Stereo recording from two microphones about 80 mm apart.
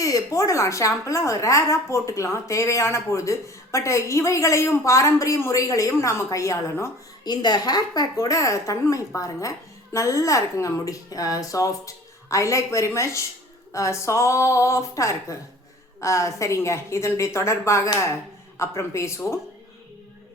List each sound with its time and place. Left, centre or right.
0.0 s a woman's voice: left
7.3 s a woman's voice: left